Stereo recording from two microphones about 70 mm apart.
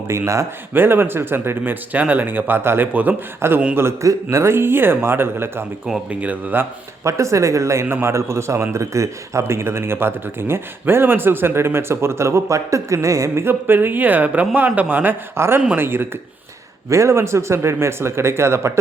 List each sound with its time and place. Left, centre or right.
0.1 s speech: right
0.7 s speech: right
3.4 s a man's voice: right
6.1 s speech: right
7.0 s a man's voice: right
16.9 s a man's voice: right